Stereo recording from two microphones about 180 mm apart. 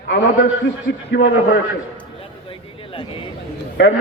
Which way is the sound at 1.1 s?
75° left (ahead or behind).